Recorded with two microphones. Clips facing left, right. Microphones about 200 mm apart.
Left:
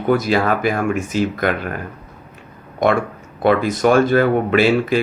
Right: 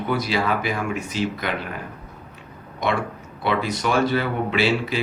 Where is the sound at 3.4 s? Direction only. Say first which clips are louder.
Left 8 dB; 50° left (ahead or behind).